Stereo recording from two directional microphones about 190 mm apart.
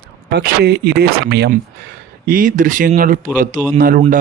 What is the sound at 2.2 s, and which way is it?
Speech, 45° right (ahead or behind).